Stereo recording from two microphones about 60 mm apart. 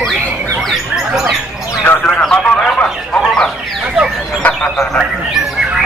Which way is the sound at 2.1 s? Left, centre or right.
Centre.